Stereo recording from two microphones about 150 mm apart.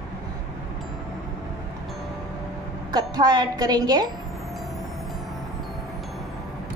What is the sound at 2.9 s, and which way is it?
A woman's voice, 25° right (ahead or behind).